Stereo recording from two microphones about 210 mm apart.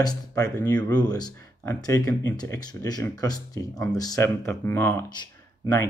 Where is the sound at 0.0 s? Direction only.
15° left (ahead or behind).